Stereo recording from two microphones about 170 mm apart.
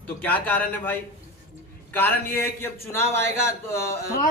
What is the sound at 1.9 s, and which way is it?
A man's voice, 10° left (ahead or behind).